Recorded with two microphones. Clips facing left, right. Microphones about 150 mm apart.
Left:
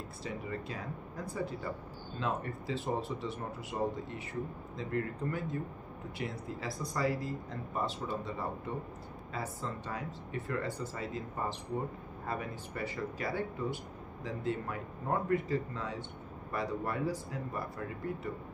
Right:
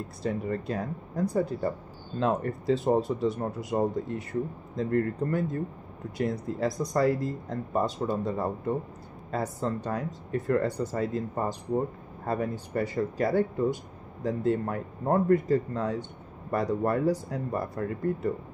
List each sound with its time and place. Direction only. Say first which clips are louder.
0.2 s speech: right 10 dB; 45° right (ahead or behind)